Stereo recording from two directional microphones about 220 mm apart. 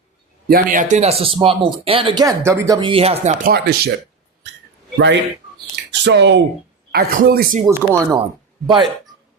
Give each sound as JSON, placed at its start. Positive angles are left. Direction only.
{"t": 0.4, "sound": "speech", "side_deg": -40}
{"t": 3.4, "sound": "speech", "side_deg": -45}
{"t": 4.9, "sound": "speech", "side_deg": -55}
{"t": 7.6, "sound": "speech", "side_deg": -10}
{"t": 8.6, "sound": "speech", "side_deg": -20}